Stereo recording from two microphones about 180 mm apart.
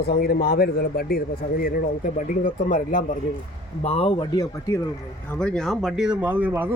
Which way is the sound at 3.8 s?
35° left (ahead or behind).